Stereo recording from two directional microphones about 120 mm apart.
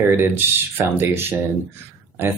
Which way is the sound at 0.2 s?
20° right (ahead or behind).